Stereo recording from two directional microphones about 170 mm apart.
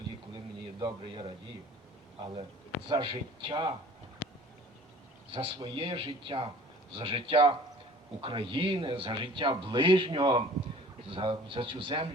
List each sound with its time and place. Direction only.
0.8 s speech: 25° right (ahead or behind)
2.9 s speech: 30° right (ahead or behind)
5.3 s speech: 30° right (ahead or behind)